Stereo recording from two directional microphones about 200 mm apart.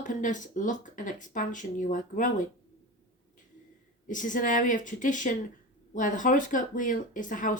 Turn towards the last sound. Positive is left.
turn(degrees=40)  # may be behind; listen again after turning